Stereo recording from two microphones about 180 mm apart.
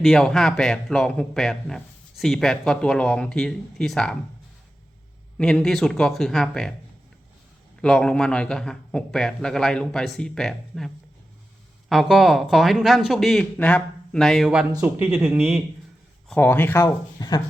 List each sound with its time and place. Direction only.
0.0 s a man's voice: centre (ahead or behind)
5.4 s a man's voice: 5° left (ahead or behind)
7.8 s a man's voice: 5° left (ahead or behind)
16.3 s speech: 10° left (ahead or behind)
16.8 s speech: 20° left (ahead or behind)